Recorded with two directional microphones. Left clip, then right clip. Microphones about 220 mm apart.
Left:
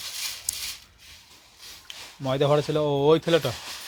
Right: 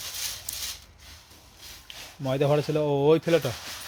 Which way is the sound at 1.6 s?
Centre (ahead or behind).